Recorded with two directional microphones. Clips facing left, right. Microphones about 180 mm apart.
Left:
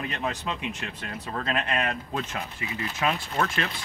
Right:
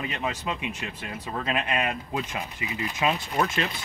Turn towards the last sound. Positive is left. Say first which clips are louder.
# right 2 dB
turn(degrees=-20)  # may be behind; listen again after turning